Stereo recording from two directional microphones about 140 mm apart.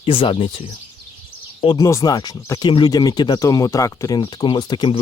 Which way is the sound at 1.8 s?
20° left (ahead or behind).